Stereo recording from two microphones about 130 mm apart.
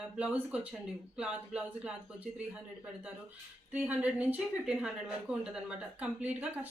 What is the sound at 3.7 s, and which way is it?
A woman's voice, 15° right (ahead or behind).